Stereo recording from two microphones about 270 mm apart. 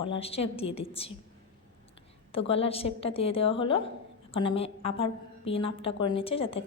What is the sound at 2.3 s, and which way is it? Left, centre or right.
A woman's voice, left.